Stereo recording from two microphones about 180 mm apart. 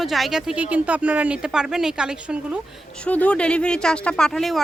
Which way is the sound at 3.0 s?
5° left (ahead or behind).